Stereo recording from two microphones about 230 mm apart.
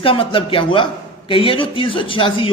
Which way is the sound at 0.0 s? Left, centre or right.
Left.